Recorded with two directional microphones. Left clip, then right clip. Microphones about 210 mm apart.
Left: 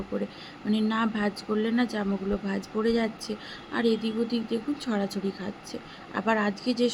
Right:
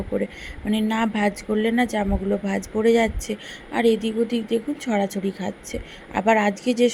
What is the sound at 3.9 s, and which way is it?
Speech, 45° right (ahead or behind).